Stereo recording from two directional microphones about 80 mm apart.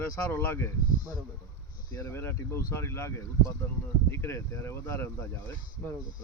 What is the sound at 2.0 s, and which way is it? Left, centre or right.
Speech, left.